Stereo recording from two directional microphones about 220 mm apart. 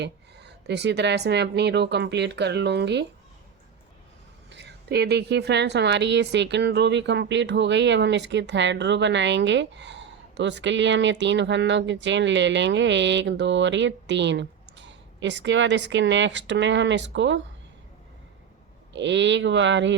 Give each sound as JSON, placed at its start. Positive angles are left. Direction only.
{"t": 0.0, "sound": "a woman's voice", "side_deg": -50}
{"t": 4.4, "sound": "a woman's voice", "side_deg": -50}
{"t": 18.9, "sound": "speech", "side_deg": -55}